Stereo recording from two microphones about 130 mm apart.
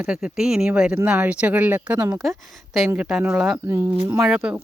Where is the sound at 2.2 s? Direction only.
Centre (ahead or behind).